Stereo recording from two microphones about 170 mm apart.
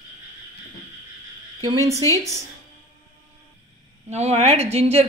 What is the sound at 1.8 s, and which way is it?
Speech, 20° left (ahead or behind).